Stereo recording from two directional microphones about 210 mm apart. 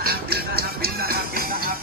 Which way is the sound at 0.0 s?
45° right (ahead or behind).